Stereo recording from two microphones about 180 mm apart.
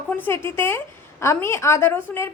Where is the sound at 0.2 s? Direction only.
10° left (ahead or behind).